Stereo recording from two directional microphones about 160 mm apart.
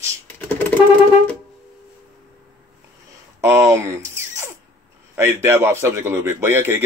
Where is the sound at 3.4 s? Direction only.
20° right (ahead or behind).